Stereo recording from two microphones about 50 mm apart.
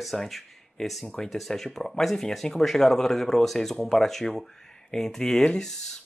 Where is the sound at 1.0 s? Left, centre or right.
Centre.